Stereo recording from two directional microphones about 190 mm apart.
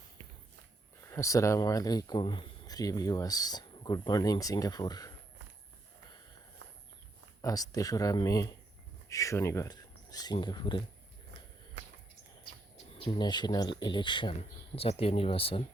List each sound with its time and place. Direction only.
1.1 s speech: 15° left (ahead or behind)
7.4 s speech: 20° left (ahead or behind)
13.1 s speech: 20° left (ahead or behind)